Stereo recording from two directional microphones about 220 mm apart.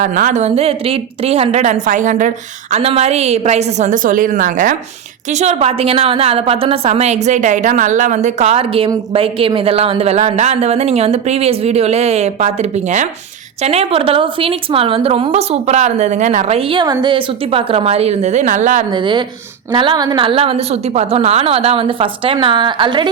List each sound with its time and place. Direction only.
0.0 s a woman's voice: 35° right (ahead or behind)
18.9 s a woman's voice: 20° right (ahead or behind)